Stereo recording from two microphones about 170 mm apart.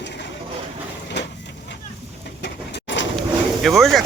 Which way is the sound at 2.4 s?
90° left.